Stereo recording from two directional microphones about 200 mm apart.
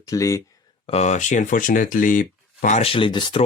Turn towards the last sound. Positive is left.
turn(degrees=25)  # may be behind; listen again after turning